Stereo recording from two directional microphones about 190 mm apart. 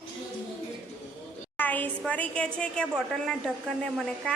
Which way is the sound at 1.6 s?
10° left (ahead or behind).